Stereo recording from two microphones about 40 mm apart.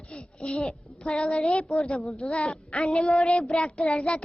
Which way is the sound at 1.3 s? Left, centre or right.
Left.